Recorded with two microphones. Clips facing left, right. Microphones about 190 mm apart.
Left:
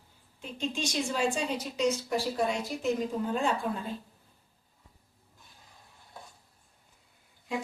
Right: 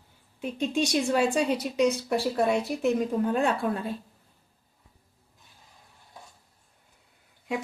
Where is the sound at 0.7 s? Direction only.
60° right (ahead or behind).